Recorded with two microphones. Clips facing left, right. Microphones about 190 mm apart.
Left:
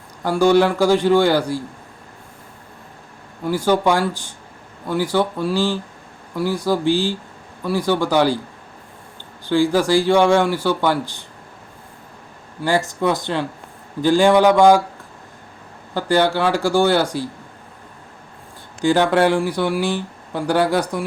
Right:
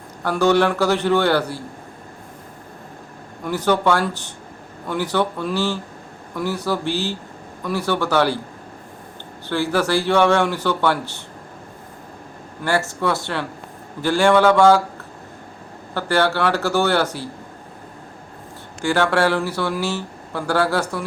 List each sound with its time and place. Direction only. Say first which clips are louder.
0.3 s speech: left 2 dB; 10° left (ahead or behind)
3.4 s speech: left 2 dB; 10° left (ahead or behind)
9.5 s speech: left 4 dB; 15° left (ahead or behind)
12.6 s speech: left 2 dB; 15° left (ahead or behind)
16.0 s speech: left 2 dB; 15° left (ahead or behind)
18.8 s speech: left 3 dB; 15° left (ahead or behind)